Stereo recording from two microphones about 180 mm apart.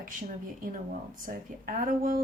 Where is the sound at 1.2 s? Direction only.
50° right (ahead or behind).